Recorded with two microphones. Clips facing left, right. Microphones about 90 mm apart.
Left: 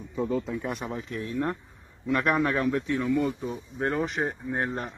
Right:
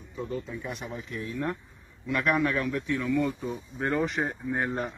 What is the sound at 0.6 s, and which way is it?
A man's voice, 50° left (ahead or behind).